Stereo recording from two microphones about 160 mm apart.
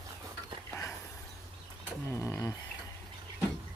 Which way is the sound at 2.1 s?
20° left (ahead or behind).